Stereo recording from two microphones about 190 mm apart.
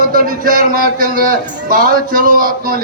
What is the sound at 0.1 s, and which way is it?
A man's voice, 50° right (ahead or behind).